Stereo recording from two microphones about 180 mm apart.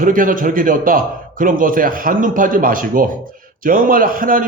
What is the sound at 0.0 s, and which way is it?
A man's voice, 50° right (ahead or behind).